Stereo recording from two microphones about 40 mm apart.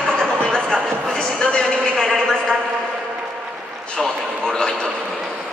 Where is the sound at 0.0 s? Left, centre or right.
Left.